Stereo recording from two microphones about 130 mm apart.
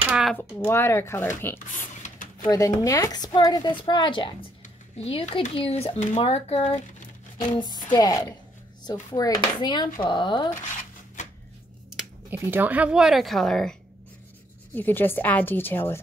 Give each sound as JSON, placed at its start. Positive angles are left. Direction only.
{"t": 0.1, "sound": "a sound", "side_deg": 0}
{"t": 0.4, "sound": "speech", "side_deg": 15}
{"t": 2.5, "sound": "a woman's voice", "side_deg": 25}
{"t": 4.9, "sound": "speech", "side_deg": 50}
{"t": 7.5, "sound": "a woman's voice", "side_deg": 35}
{"t": 12.3, "sound": "speech", "side_deg": -15}
{"t": 14.7, "sound": "a woman's voice", "side_deg": 15}